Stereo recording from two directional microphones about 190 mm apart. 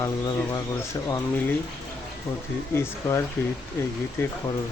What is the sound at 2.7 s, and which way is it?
Speech, 15° left (ahead or behind).